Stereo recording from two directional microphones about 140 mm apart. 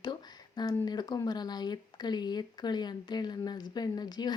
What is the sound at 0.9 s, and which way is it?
Speech, 30° left (ahead or behind).